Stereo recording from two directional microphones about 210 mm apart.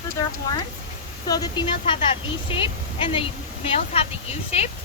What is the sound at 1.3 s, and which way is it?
Speech, 20° left (ahead or behind).